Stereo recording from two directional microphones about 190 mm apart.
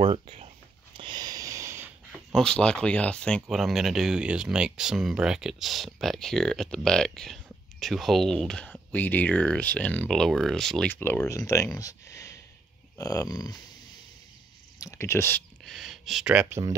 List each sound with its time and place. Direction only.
0.0 s speech: 30° right (ahead or behind)
0.9 s a sound: 25° right (ahead or behind)
2.1 s speech: 5° left (ahead or behind); by 13.6 s 20° left (ahead or behind)
14.8 s speech: 15° left (ahead or behind)
15.6 s speech: centre (ahead or behind)